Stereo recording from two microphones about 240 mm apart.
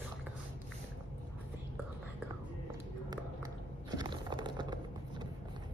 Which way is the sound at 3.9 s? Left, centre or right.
Centre.